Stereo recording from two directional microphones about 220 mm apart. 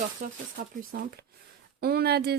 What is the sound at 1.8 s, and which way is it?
Speech, 45° right (ahead or behind).